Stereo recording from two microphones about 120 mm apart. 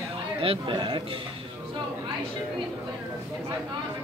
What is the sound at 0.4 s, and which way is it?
Speech, 45° right (ahead or behind).